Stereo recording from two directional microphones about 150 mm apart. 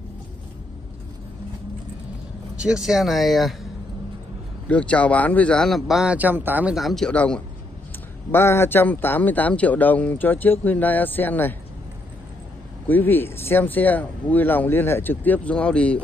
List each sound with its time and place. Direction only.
2.5 s speech: 5° right (ahead or behind)
4.6 s speech: 10° left (ahead or behind)
12.8 s speech: 10° left (ahead or behind)